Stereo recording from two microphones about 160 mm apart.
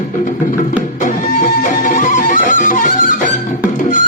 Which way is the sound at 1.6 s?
55° left (ahead or behind).